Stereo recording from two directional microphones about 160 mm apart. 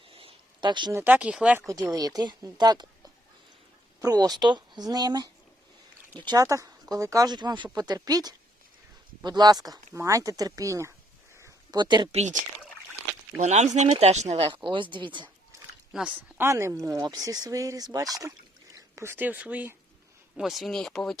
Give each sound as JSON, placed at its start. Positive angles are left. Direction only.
{"t": 0.1, "sound": "a sound", "side_deg": -35}
{"t": 0.9, "sound": "speech", "side_deg": -10}
{"t": 1.6, "sound": "speech", "side_deg": -20}
{"t": 11.3, "sound": "a sound", "side_deg": -20}
{"t": 12.1, "sound": "speech", "side_deg": -45}
{"t": 13.4, "sound": "speech", "side_deg": -45}
{"t": 15.9, "sound": "speech", "side_deg": -5}